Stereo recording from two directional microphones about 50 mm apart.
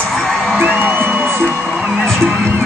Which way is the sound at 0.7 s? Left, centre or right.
Right.